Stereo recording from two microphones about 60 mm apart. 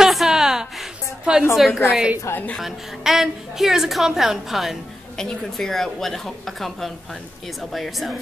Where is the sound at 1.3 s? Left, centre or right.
Centre.